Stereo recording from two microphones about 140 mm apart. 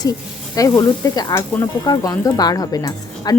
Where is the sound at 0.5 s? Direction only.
25° left (ahead or behind).